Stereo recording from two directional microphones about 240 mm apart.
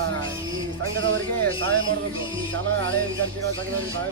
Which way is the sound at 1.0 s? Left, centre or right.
Right.